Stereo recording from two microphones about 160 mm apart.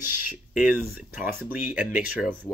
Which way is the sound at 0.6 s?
10° right (ahead or behind).